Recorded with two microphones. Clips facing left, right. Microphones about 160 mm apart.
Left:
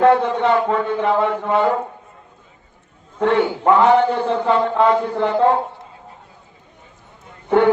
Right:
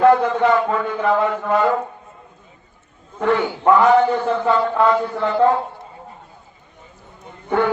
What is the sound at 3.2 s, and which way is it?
A man's voice, 25° left (ahead or behind).